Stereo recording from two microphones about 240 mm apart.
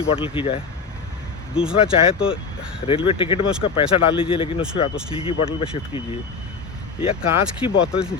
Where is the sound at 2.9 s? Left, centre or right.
Left.